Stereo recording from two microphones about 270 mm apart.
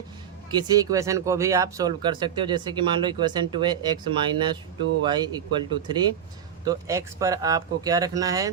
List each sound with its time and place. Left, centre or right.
0.5 s speech: centre